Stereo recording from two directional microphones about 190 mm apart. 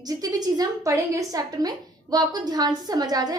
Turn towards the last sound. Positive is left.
turn(degrees=-20)  # may be behind; listen again after turning